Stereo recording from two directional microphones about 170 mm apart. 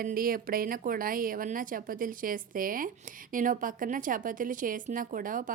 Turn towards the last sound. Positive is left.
turn(degrees=-55)  # may be behind; listen again after turning